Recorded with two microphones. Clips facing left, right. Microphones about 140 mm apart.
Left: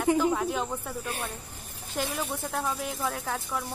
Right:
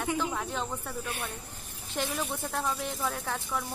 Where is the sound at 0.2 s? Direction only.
5° left (ahead or behind).